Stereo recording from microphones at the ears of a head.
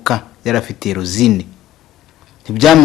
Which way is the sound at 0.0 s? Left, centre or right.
Left.